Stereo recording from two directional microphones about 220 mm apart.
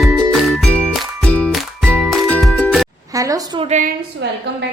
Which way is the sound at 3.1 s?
15° right (ahead or behind).